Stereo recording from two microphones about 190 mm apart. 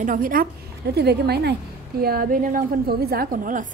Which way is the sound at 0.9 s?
60° right (ahead or behind).